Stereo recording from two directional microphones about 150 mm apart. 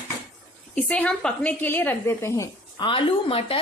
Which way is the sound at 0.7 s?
5° left (ahead or behind).